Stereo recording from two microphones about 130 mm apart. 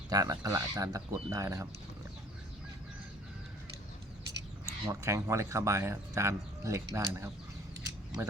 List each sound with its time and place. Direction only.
0.1 s speech: 30° right (ahead or behind)
4.6 s speech: 25° right (ahead or behind)